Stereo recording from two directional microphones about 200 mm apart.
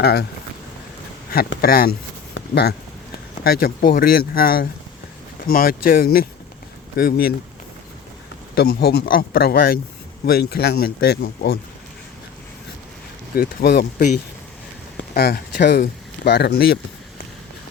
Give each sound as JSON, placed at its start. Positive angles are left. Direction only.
{"t": 0.0, "sound": "speech", "side_deg": 55}
{"t": 1.6, "sound": "speech", "side_deg": 50}
{"t": 2.3, "sound": "a sound", "side_deg": 55}
{"t": 3.4, "sound": "speech", "side_deg": 50}
{"t": 8.5, "sound": "speech", "side_deg": 50}
{"t": 13.3, "sound": "speech", "side_deg": 50}
{"t": 14.9, "sound": "speech", "side_deg": 50}